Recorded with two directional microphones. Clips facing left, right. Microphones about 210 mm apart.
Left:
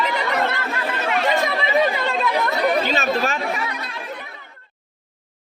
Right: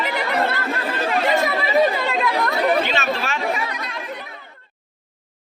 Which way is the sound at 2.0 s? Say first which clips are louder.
Even; centre (ahead or behind).